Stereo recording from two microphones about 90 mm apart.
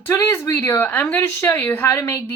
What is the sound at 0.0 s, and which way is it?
A woman's voice, 25° left (ahead or behind).